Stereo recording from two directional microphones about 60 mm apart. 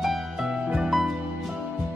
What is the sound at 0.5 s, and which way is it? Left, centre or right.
Music, centre.